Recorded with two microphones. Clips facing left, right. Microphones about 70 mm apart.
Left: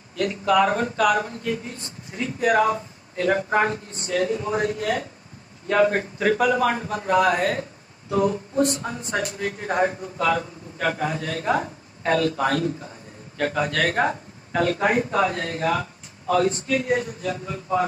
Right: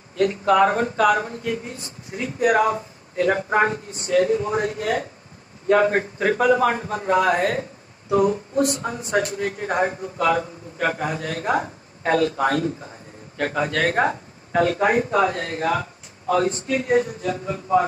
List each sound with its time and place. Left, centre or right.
0.1 s speech: right